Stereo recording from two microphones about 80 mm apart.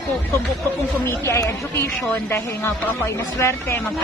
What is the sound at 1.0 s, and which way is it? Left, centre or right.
Speech, left.